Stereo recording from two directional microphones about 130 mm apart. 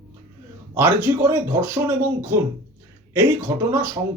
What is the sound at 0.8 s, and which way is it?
Speech, 20° right (ahead or behind).